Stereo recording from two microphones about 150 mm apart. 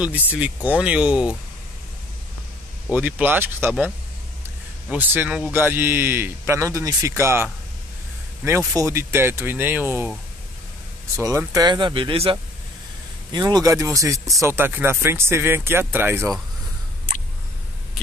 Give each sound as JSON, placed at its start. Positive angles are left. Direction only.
{"t": 0.0, "sound": "speech", "side_deg": -10}
{"t": 2.9, "sound": "speech", "side_deg": -10}
{"t": 8.5, "sound": "speech", "side_deg": -20}
{"t": 11.1, "sound": "speech", "side_deg": -20}